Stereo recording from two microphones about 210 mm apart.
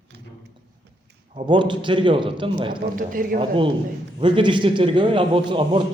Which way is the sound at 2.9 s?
40° right (ahead or behind).